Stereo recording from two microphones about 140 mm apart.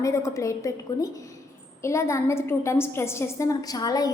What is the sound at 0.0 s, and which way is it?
A woman's voice, 20° left (ahead or behind).